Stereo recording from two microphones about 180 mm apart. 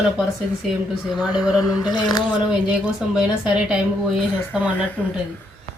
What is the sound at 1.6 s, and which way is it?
Speech, 20° left (ahead or behind).